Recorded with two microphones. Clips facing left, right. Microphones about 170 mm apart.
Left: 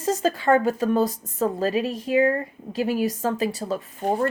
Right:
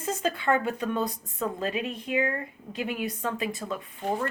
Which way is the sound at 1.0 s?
90° left.